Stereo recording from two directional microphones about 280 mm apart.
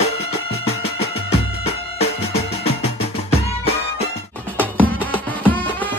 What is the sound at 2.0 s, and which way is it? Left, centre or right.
Music, left.